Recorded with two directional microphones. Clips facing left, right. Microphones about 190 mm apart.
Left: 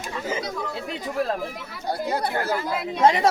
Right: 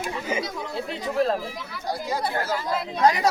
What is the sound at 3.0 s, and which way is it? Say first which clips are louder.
Speech: left 2 dB; 25° left (ahead or behind).